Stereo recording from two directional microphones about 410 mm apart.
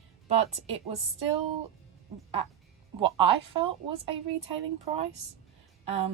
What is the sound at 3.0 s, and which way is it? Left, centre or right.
Speech, centre.